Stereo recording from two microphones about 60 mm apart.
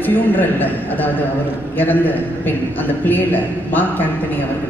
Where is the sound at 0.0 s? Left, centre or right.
Left.